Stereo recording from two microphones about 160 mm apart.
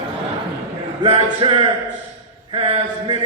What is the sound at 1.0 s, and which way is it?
Speech, 35° right (ahead or behind).